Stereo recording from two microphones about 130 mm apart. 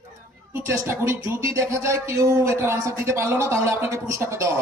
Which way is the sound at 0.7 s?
20° right (ahead or behind).